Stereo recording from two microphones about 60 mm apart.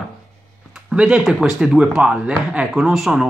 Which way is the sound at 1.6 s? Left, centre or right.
Centre.